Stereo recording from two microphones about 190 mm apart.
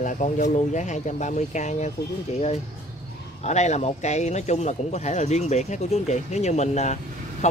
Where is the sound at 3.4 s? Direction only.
35° left (ahead or behind).